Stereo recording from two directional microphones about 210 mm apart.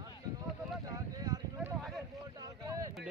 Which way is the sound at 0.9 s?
20° right (ahead or behind).